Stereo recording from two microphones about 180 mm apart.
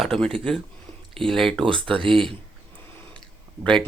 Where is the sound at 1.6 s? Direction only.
30° right (ahead or behind).